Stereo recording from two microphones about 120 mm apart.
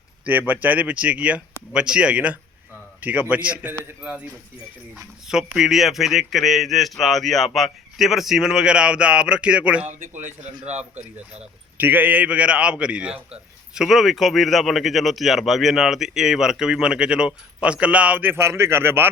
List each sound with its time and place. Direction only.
0.3 s a man's voice: 15° right (ahead or behind)
5.3 s speech: 5° right (ahead or behind)
9.8 s a man's voice: 85° right; by 11.0 s 70° right (ahead or behind)
11.3 s a man's voice: 15° right (ahead or behind)